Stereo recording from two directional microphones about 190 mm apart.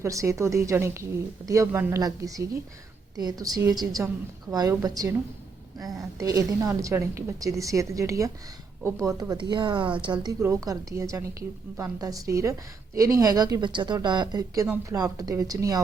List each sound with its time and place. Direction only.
0.0 s a woman's voice: 15° right (ahead or behind)
6.1 s a woman's voice: 15° right (ahead or behind)